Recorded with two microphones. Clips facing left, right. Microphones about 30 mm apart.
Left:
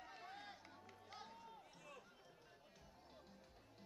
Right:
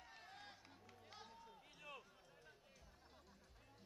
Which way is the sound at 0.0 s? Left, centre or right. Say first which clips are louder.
Left 4 dB; centre.